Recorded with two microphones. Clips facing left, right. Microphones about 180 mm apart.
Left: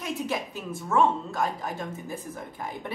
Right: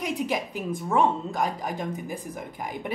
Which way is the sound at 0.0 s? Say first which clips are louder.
Right 3 dB; 15° right (ahead or behind).